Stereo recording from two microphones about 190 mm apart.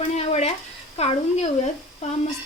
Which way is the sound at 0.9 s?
35° left (ahead or behind).